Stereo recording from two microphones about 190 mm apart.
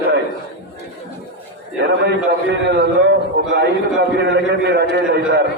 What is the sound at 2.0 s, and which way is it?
A man's voice, 65° right (ahead or behind).